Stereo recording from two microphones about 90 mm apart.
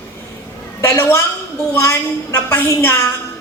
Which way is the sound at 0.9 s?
30° left (ahead or behind).